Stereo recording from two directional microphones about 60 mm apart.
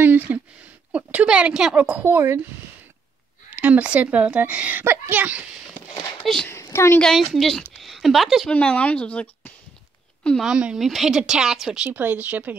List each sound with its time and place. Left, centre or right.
0.0 s a sound: right
1.2 s speech: centre
1.8 s speech: right
2.1 s speech: right
3.6 s a child's voice: right
6.5 s a sound: left
7.2 s speech: centre
7.7 s a sound: centre
8.5 s speech: centre
10.4 s speech: centre
10.8 s speech: centre
11.1 s speech: centre
11.9 s speech: right